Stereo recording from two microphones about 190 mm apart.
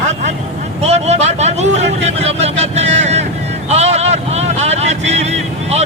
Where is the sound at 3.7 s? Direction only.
35° right (ahead or behind).